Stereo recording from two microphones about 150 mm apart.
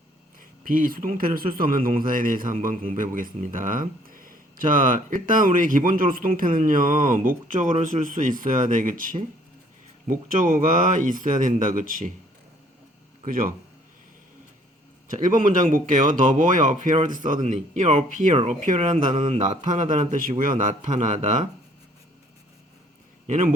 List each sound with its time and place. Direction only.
0.6 s speech: 65° right (ahead or behind)
13.2 s speech: 65° right (ahead or behind)
15.0 s speech: 60° right (ahead or behind)
19.1 s mantra: 40° right (ahead or behind)
19.4 s speech: 55° right (ahead or behind)
23.2 s a man's voice: 60° right (ahead or behind)